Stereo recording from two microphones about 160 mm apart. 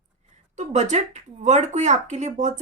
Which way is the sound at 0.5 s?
45° right (ahead or behind).